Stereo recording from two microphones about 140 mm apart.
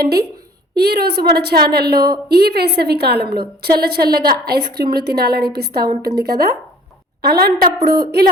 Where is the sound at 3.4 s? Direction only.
90° right.